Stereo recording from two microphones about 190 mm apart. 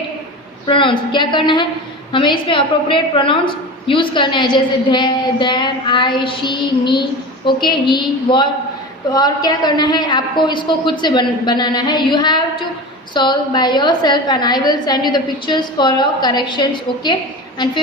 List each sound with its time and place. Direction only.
0.7 s a woman's voice: 25° left (ahead or behind)